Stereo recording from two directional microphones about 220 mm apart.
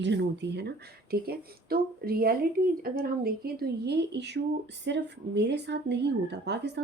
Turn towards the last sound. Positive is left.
turn(degrees=-50)  # may be behind; listen again after turning